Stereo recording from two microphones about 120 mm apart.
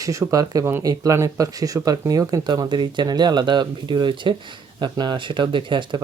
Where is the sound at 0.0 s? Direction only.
30° right (ahead or behind).